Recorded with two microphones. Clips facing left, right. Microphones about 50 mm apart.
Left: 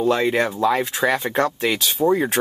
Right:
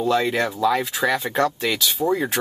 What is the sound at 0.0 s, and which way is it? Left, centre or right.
Speech, centre.